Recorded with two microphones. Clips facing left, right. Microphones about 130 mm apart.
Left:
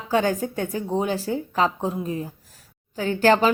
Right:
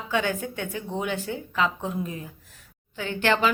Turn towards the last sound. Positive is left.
turn(degrees=40)  # may be behind; listen again after turning